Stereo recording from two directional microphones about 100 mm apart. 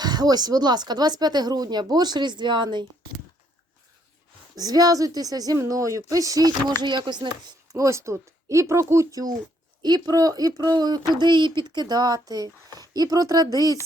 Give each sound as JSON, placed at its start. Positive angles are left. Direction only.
{"t": 0.0, "sound": "speech", "side_deg": -45}
{"t": 4.5, "sound": "speech", "side_deg": -40}
{"t": 6.8, "sound": "speech", "side_deg": -50}
{"t": 7.7, "sound": "speech", "side_deg": -30}